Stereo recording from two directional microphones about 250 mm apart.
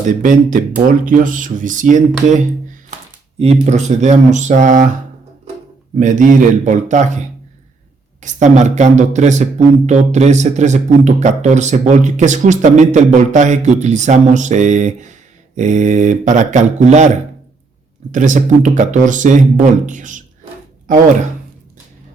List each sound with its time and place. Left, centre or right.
0.0 s speech: right
3.3 s speech: right
6.0 s speech: right
18.1 s speech: right